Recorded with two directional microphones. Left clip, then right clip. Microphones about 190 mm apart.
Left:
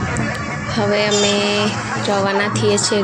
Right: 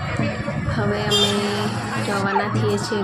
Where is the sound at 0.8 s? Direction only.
10° left (ahead or behind).